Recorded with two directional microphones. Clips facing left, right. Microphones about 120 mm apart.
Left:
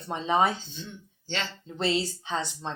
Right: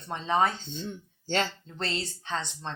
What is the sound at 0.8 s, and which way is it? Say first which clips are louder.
Speech: right 5 dB; 40° right (ahead or behind).